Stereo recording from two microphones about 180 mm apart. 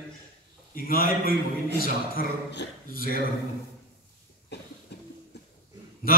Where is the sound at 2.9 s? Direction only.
55° right (ahead or behind).